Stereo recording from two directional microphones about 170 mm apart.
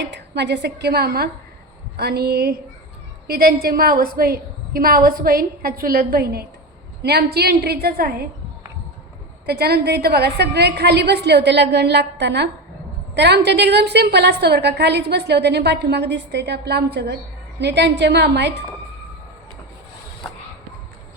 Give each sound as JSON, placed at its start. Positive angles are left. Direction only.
{"t": 0.0, "sound": "a woman's voice", "side_deg": -90}
{"t": 9.5, "sound": "a woman's voice", "side_deg": -70}
{"t": 17.6, "sound": "a woman's voice", "side_deg": -90}